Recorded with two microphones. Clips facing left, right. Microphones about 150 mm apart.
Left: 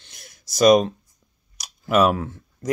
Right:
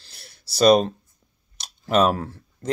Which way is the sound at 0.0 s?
35° right (ahead or behind).